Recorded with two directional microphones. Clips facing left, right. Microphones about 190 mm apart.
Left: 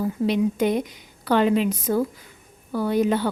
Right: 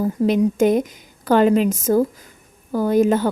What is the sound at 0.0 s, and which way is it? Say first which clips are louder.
A woman's voice: right 4 dB; 45° right (ahead or behind).